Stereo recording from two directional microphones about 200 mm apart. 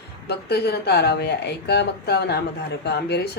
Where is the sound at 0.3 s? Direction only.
55° left (ahead or behind).